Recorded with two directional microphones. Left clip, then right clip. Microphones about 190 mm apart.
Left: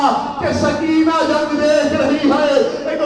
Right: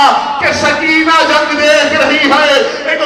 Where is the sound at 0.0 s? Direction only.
15° right (ahead or behind).